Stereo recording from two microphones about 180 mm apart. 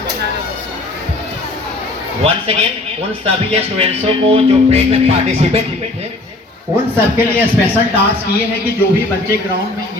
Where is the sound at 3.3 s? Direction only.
35° right (ahead or behind).